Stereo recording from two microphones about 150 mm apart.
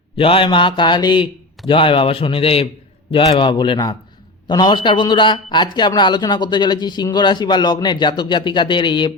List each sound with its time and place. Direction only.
0.2 s a man's voice: 35° left (ahead or behind)